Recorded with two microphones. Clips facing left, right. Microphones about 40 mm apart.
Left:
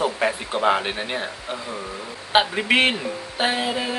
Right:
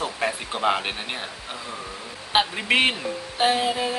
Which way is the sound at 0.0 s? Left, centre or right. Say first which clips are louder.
Left 4 dB; centre.